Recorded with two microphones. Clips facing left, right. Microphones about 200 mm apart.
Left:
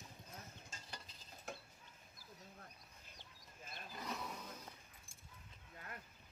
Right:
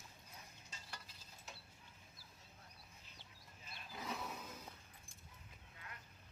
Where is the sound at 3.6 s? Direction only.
50° left (ahead or behind).